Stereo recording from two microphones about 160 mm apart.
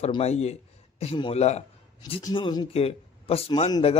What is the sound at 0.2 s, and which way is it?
A man's voice, 40° left (ahead or behind).